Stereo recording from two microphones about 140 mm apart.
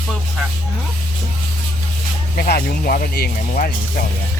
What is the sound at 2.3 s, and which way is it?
Speech, 90° left.